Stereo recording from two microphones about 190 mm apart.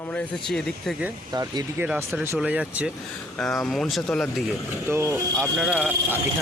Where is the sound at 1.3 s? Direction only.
20° right (ahead or behind).